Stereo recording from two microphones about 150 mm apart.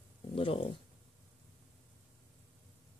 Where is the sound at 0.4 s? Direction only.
40° left (ahead or behind).